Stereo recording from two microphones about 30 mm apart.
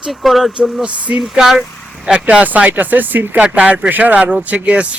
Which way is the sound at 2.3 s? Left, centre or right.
Right.